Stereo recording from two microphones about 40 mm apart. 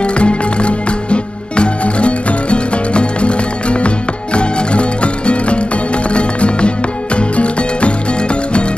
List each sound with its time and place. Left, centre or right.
0.0 s music: left